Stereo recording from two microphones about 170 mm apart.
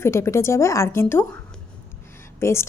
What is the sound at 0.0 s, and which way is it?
A woman's voice, 15° left (ahead or behind).